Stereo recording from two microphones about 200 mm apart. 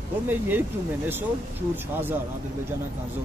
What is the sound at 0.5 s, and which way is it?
Speech, 10° right (ahead or behind).